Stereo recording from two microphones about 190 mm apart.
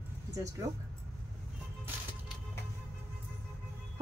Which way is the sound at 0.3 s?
15° right (ahead or behind).